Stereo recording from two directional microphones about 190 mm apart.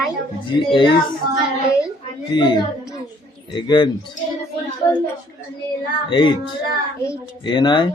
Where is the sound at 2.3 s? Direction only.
25° left (ahead or behind).